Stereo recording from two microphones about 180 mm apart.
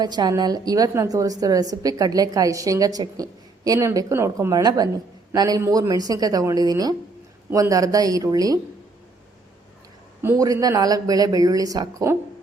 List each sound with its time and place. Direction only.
0.0 s a woman's voice: 25° right (ahead or behind)
10.2 s a woman's voice: 15° right (ahead or behind)